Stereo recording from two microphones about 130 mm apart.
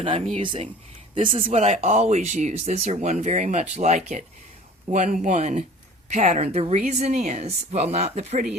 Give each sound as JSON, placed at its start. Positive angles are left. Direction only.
{"t": 0.0, "sound": "speech", "side_deg": -50}
{"t": 4.9, "sound": "speech", "side_deg": -75}